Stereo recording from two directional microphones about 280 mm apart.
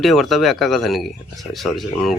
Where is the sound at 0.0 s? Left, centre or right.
Centre.